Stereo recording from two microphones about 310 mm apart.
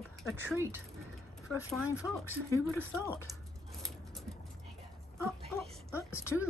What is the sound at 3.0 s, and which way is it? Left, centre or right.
Speech, centre.